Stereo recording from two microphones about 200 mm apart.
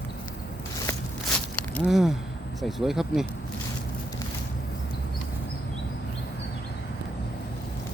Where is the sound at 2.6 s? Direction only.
Centre (ahead or behind).